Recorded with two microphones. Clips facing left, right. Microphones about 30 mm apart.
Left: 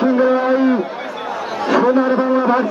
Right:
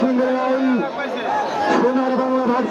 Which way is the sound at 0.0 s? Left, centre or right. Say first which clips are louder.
Left 4 dB; centre.